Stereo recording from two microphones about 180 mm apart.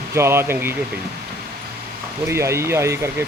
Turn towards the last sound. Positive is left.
turn(degrees=-15)  # may be behind; listen again after turning